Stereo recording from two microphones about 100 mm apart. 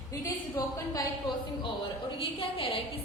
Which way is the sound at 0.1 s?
35° left (ahead or behind).